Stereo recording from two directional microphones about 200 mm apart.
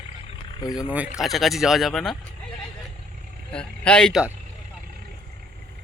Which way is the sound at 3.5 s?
5° left (ahead or behind).